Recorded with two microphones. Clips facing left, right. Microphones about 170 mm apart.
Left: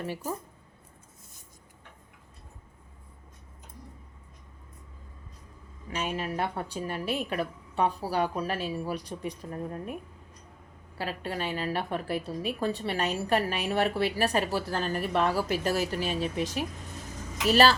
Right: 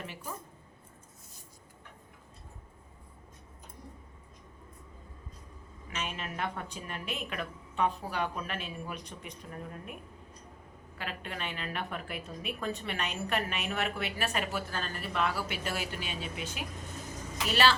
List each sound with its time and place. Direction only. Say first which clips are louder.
0.0 s a woman's voice: left 8 dB; 40° left (ahead or behind)
5.9 s a woman's voice: left 7 dB; 35° left (ahead or behind)
10.9 s a woman's voice: left 7 dB; 35° left (ahead or behind)